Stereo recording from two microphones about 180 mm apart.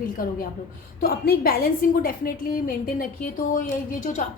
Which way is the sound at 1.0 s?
55° left (ahead or behind).